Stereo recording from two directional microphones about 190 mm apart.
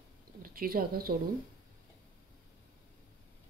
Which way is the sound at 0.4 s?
50° right (ahead or behind).